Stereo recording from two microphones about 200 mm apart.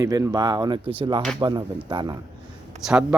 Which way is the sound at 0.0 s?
15° right (ahead or behind).